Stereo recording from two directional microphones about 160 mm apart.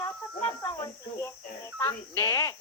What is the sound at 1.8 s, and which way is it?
Speech, 20° left (ahead or behind).